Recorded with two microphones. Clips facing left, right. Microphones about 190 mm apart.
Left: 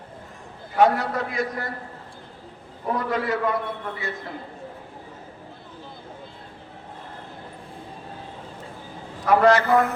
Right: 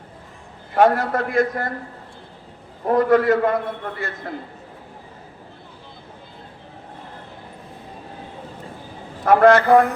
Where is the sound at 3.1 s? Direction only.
50° right (ahead or behind).